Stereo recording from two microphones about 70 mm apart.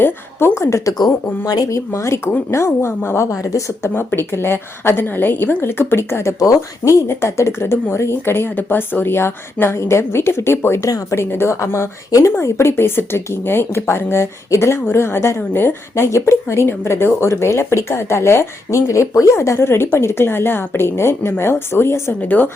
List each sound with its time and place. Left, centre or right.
0.0 s a woman's voice: left
0.9 s speech: left
1.7 s a woman's voice: left
6.4 s a woman's voice: left
22.2 s speech: left